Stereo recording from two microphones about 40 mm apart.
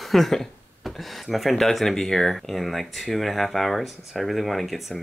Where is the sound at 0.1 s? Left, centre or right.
Centre.